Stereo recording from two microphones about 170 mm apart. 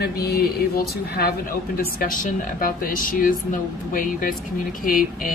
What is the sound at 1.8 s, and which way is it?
A woman's voice, 55° left (ahead or behind).